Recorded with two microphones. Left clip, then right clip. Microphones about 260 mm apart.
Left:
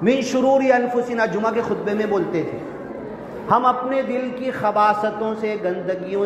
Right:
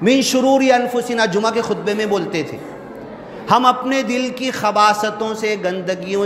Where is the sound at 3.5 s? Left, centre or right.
Right.